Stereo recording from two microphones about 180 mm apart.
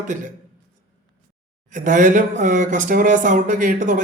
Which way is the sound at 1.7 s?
45° right (ahead or behind).